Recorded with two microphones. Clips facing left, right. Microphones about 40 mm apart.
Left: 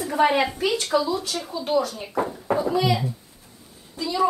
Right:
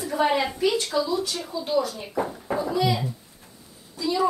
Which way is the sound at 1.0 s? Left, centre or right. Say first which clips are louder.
Left 1 dB; left.